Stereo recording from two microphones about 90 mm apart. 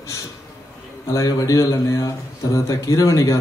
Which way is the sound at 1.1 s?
40° left (ahead or behind).